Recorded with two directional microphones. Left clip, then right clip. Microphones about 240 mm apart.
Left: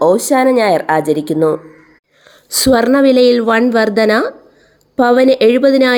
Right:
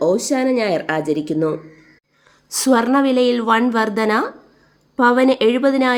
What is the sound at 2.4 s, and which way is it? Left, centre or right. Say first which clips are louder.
Speech: left 5 dB; centre.